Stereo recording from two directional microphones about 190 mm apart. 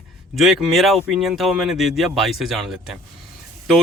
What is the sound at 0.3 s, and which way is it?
Speech, centre (ahead or behind).